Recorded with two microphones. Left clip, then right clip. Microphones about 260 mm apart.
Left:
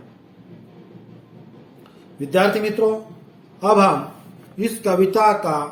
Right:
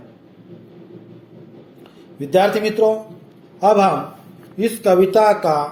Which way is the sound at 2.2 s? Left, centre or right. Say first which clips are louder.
Right 2 dB; centre.